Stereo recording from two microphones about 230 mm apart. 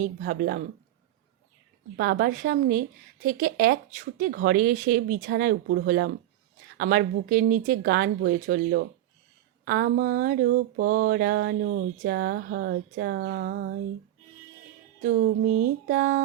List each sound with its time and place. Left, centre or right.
0.0 s speech: right
2.0 s speech: right
15.0 s speech: right